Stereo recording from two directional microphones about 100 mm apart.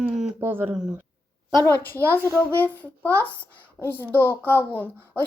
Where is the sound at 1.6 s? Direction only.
20° left (ahead or behind).